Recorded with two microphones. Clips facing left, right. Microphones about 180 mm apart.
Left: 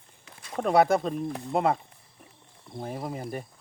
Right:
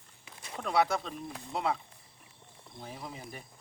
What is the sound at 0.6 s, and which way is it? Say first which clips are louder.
Speech: left 7 dB; 50° left (ahead or behind).